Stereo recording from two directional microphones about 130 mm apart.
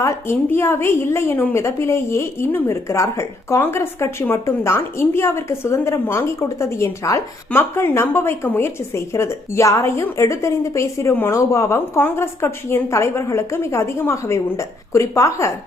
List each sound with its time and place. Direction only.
0.0 s a woman's voice: 20° left (ahead or behind)